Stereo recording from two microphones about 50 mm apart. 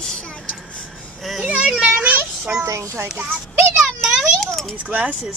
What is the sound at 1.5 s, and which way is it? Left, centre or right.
Speech, right.